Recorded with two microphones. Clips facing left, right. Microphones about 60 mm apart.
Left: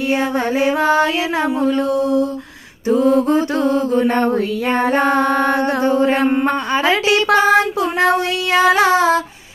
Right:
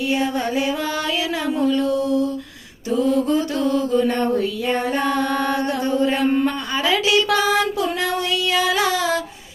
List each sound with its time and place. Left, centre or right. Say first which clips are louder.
0.1 s mantra: left 4 dB; left